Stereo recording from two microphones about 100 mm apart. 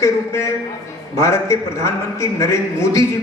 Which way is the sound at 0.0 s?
30° left (ahead or behind).